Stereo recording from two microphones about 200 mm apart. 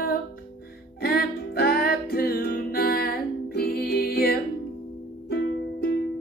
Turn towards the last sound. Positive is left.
turn(degrees=50)  # may be behind; listen again after turning